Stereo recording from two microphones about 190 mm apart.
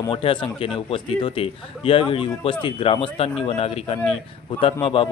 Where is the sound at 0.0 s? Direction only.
25° left (ahead or behind).